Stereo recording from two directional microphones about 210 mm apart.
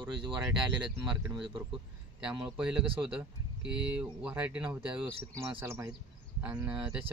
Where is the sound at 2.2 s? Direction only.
5° right (ahead or behind).